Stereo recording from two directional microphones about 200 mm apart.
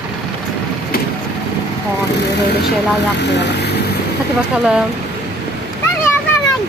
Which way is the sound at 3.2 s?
60° left (ahead or behind).